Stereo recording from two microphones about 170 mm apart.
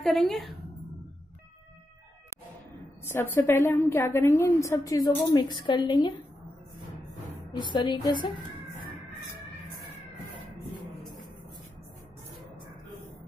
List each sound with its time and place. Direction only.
0.0 s a woman's voice: centre (ahead or behind)
3.1 s a woman's voice: 15° left (ahead or behind)
7.5 s a woman's voice: 25° left (ahead or behind)